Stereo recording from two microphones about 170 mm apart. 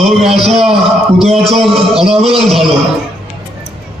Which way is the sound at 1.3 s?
35° right (ahead or behind).